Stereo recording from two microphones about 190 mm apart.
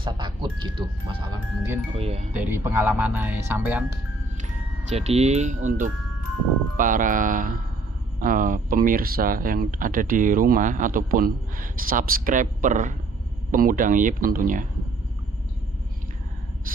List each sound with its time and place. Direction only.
0.0 s music: 25° right (ahead or behind)
2.0 s speech: 30° right (ahead or behind)
2.3 s speech: 10° right (ahead or behind)
4.9 s speech: 35° right (ahead or behind)